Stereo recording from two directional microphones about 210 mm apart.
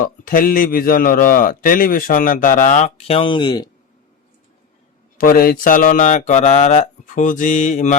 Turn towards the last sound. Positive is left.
turn(degrees=35)  # may be behind; listen again after turning